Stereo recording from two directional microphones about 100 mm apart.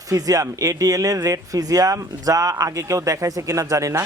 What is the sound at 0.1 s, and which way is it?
Speech, 35° right (ahead or behind).